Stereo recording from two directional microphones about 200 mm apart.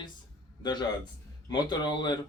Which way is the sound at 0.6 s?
20° left (ahead or behind).